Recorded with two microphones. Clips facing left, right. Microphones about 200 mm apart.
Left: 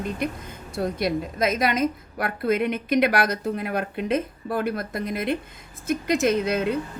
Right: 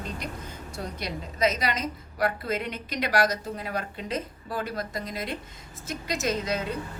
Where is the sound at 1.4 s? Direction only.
55° left (ahead or behind).